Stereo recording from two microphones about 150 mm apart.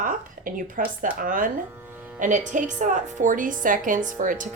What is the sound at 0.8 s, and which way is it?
A woman's voice, 60° right (ahead or behind).